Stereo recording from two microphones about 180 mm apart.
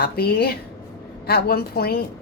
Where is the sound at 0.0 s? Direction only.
60° left (ahead or behind).